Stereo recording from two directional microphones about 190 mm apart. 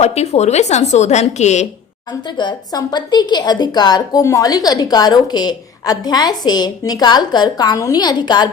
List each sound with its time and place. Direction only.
0.0 s a woman's voice: 35° left (ahead or behind)
2.4 s a woman's voice: 20° left (ahead or behind)